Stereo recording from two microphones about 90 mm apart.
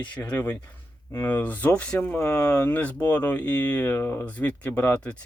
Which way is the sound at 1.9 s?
25° left (ahead or behind).